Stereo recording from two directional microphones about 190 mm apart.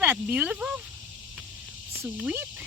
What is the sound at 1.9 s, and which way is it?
Speech, 10° right (ahead or behind).